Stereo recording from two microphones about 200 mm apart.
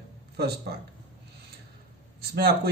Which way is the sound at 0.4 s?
55° right (ahead or behind).